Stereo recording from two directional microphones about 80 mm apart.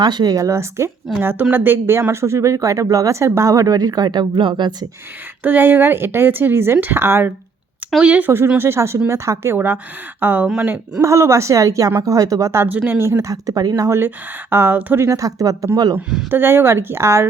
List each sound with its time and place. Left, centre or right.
0.0 s speech: right
0.3 s speech: right
1.2 s speech: right
5.4 s speech: right
8.5 s speech: right
10.4 s speech: centre
11.0 s speech: right
12.6 s speech: right
13.1 s speech: right
13.8 s speech: right
15.0 s speech: right
16.3 s speech: right